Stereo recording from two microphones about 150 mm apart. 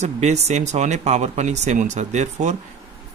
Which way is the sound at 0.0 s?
50° right (ahead or behind).